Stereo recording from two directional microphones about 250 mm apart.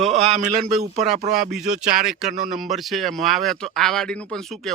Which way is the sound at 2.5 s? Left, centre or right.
Centre.